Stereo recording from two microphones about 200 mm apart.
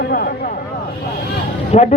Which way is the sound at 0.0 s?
50° left (ahead or behind).